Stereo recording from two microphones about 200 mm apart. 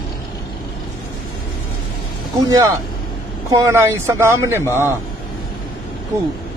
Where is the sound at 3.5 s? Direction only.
15° right (ahead or behind).